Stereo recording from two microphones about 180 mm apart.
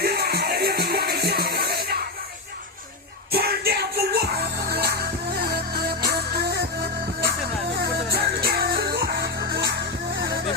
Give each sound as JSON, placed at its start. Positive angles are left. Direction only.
{"t": 0.0, "sound": "music", "side_deg": -60}
{"t": 3.3, "sound": "music", "side_deg": -60}